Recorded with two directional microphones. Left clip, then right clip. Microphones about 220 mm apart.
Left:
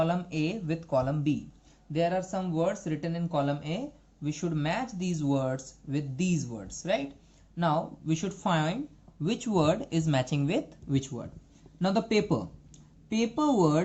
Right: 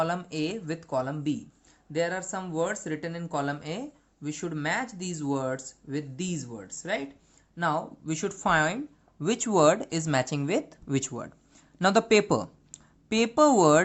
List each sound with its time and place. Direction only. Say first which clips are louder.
0.0 s speech: even; 35° right (ahead or behind); by 13.8 s 60° right (ahead or behind)